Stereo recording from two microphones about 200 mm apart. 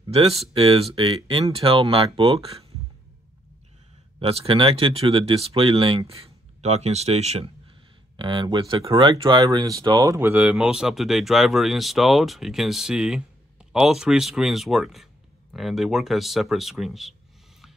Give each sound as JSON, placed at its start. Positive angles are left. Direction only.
{"t": 0.1, "sound": "speech", "side_deg": -30}
{"t": 4.2, "sound": "speech", "side_deg": -30}